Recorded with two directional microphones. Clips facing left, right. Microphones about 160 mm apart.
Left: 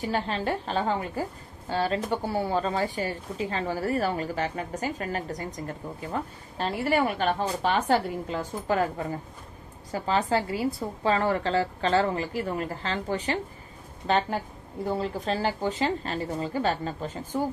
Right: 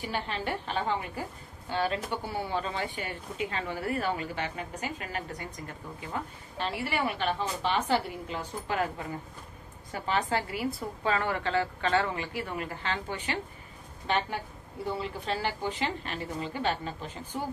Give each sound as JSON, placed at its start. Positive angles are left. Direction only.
{"t": 0.0, "sound": "speech", "side_deg": 35}
{"t": 9.9, "sound": "a woman's voice", "side_deg": 30}